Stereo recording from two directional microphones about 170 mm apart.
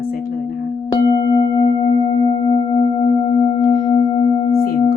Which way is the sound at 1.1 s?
25° left (ahead or behind).